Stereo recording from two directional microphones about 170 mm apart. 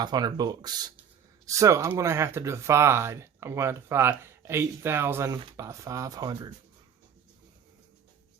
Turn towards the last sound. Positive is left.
turn(degrees=-25)  # may be behind; listen again after turning